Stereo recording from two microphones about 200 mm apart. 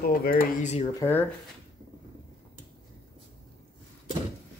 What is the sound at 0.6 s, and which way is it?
Speech, 35° left (ahead or behind).